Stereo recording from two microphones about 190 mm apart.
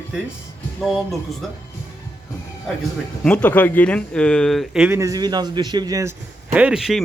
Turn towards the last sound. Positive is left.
turn(degrees=0)  # may be behind; listen again after turning